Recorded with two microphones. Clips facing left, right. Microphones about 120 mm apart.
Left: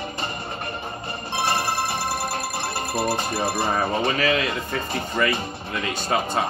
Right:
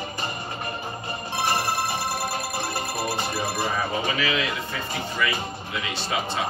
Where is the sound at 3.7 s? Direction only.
45° left (ahead or behind).